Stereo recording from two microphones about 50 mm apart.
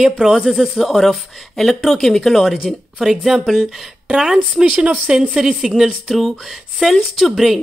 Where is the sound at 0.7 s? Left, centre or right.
Centre.